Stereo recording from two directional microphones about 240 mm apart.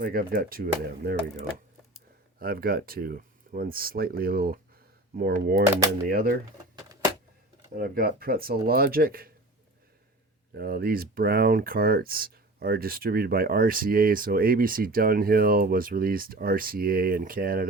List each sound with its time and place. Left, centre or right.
0.0 s speech: right
6.7 s a sound: centre
7.8 s speech: right
10.5 s speech: right